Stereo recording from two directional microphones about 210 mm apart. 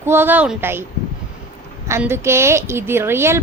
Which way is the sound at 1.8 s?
10° right (ahead or behind).